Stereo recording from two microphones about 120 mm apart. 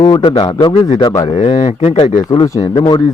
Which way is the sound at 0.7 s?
65° left (ahead or behind).